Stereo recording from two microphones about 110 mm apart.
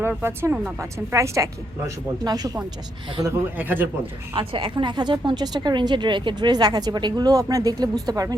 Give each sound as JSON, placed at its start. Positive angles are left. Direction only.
{"t": 0.2, "sound": "a woman's voice", "side_deg": -20}
{"t": 3.6, "sound": "speech", "side_deg": -15}
{"t": 4.4, "sound": "speech", "side_deg": -50}